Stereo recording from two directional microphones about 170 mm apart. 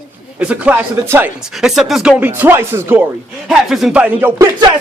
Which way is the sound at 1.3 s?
5° right (ahead or behind).